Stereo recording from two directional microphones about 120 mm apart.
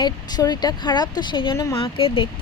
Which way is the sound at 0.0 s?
35° left (ahead or behind).